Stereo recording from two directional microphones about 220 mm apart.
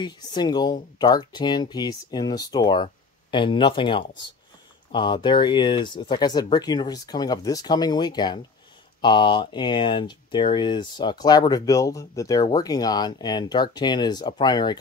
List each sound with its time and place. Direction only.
0.0 s speech: 20° left (ahead or behind)